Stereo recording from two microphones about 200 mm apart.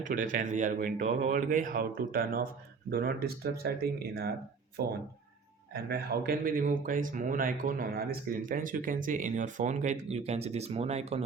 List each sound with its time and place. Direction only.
0.0 s speech: 40° right (ahead or behind)